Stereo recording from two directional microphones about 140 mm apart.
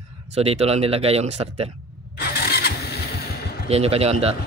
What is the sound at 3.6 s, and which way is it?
Speech, 45° right (ahead or behind).